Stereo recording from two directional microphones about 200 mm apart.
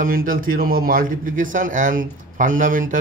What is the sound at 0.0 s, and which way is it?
A man's voice, 45° right (ahead or behind).